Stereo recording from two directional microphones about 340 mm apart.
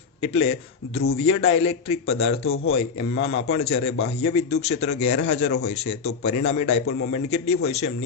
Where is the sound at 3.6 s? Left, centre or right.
Centre.